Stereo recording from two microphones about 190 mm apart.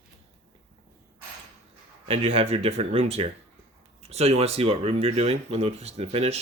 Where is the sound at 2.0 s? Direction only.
30° right (ahead or behind).